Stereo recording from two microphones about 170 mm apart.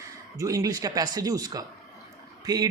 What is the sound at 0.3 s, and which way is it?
A man's voice, 20° right (ahead or behind).